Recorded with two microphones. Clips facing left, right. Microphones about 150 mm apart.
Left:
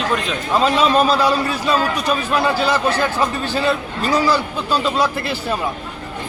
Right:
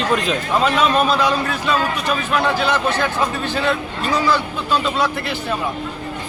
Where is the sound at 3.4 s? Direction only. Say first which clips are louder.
Left 1 dB; 35° left (ahead or behind).